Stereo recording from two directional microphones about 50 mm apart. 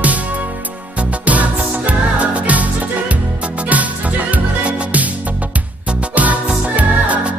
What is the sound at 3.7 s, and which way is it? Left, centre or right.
Music, right.